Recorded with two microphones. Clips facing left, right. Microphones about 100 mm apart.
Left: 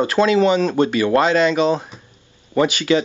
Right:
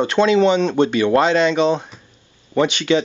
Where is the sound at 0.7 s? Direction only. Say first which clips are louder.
Right 1 dB; 25° right (ahead or behind).